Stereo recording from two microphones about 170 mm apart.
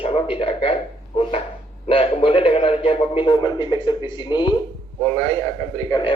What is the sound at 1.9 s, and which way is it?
A man's voice, 30° left (ahead or behind).